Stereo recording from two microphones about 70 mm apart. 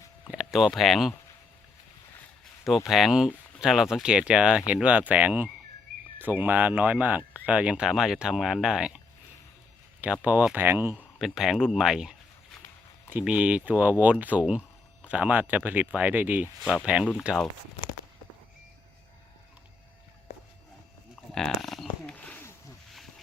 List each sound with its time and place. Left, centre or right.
0.3 s a sound: centre
0.7 s speech: centre
2.4 s speech: centre
10.0 s speech: right
11.2 s speech: centre
13.2 s speech: centre
16.9 s speech: centre
21.3 s speech: centre
22.0 s a sound: centre